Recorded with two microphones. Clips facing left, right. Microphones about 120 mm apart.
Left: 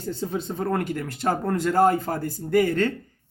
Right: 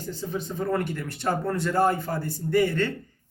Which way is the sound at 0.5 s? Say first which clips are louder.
Even; 50° left (ahead or behind).